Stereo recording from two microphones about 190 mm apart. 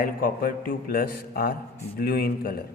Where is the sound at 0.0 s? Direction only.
45° left (ahead or behind).